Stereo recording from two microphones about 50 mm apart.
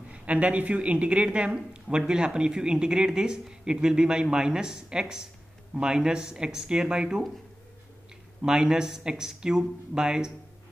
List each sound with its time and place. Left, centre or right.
0.1 s speech: right
8.4 s speech: centre